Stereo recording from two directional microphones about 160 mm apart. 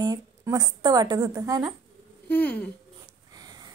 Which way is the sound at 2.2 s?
10° left (ahead or behind).